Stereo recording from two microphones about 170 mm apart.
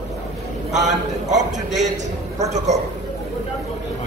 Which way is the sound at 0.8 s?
45° right (ahead or behind).